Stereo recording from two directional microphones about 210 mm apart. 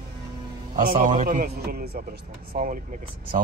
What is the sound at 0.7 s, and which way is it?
A man's voice, 40° right (ahead or behind).